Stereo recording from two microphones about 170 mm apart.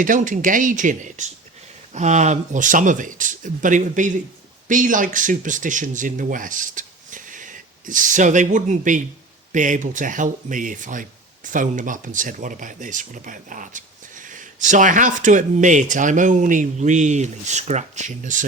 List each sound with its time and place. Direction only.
0.0 s speech: 50° right (ahead or behind)